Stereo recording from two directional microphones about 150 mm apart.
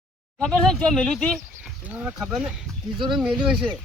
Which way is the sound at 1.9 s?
10° right (ahead or behind).